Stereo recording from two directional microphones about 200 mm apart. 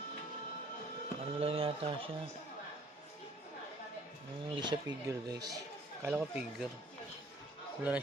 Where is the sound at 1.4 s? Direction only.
30° right (ahead or behind).